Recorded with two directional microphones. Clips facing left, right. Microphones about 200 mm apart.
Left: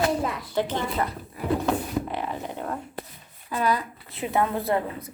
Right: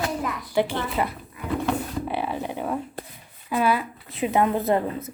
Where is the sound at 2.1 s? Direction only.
10° right (ahead or behind).